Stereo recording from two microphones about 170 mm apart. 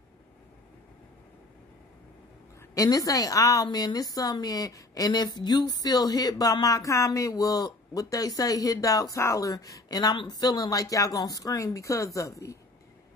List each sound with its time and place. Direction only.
2.7 s a woman's voice: 20° left (ahead or behind)